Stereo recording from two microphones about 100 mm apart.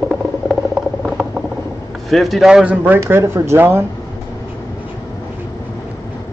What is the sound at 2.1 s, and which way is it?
Speech, centre (ahead or behind).